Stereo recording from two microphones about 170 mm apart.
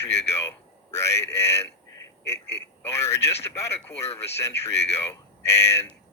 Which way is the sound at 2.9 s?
15° left (ahead or behind).